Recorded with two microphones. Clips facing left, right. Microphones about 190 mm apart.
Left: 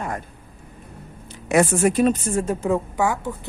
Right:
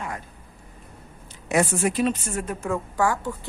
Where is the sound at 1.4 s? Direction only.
55° left (ahead or behind).